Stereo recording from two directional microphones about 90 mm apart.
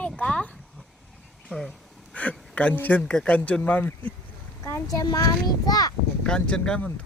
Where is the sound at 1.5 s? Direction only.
Centre (ahead or behind).